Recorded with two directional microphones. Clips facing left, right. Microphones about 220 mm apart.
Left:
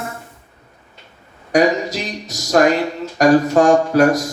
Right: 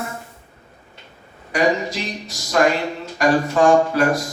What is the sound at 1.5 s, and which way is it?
Music, 40° left (ahead or behind).